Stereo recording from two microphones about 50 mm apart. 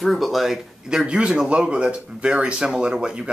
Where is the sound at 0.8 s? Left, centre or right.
Centre.